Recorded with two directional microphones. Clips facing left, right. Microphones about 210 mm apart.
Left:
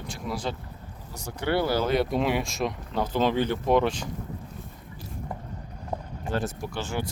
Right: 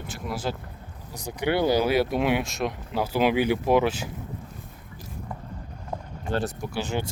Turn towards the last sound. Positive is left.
turn(degrees=-20)  # may be behind; listen again after turning